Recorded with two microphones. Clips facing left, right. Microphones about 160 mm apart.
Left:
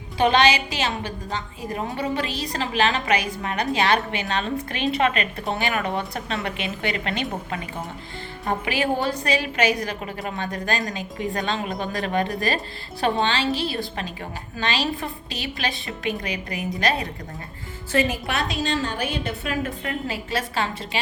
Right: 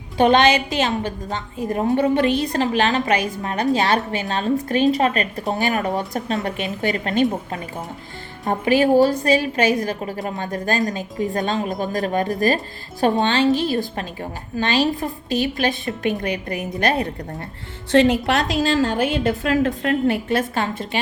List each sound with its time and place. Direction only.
0.2 s a woman's voice: 50° right (ahead or behind)
17.9 s a woman's voice: 80° right; by 21.0 s 50° right (ahead or behind)